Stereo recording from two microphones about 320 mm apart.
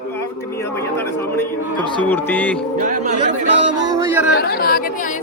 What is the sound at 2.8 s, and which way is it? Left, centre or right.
Speech, right.